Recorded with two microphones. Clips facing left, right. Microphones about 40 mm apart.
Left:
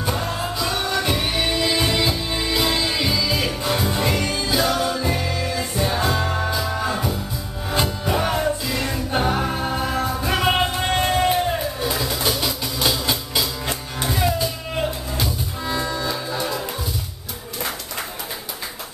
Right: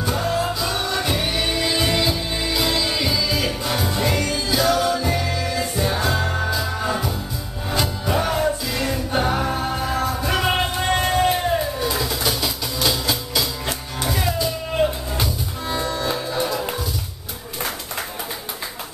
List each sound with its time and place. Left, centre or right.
0.0 s music: centre
7.7 s music: centre
15.7 s music: centre